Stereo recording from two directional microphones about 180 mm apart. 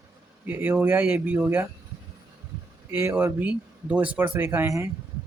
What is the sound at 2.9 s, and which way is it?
Speech, 10° right (ahead or behind).